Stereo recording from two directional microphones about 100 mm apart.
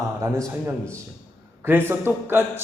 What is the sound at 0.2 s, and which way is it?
Speech, 30° right (ahead or behind).